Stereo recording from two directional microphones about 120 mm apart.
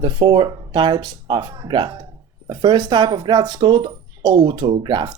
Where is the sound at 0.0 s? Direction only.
40° right (ahead or behind).